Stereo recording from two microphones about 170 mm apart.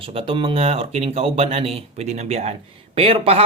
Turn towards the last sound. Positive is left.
turn(degrees=-35)  # may be behind; listen again after turning